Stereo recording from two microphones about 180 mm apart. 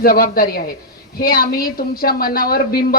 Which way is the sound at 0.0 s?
55° left (ahead or behind).